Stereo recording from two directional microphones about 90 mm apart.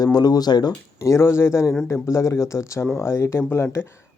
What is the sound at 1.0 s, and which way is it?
Speech, 30° left (ahead or behind).